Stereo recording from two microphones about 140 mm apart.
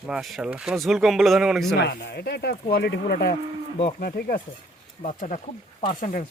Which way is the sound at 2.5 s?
90° left.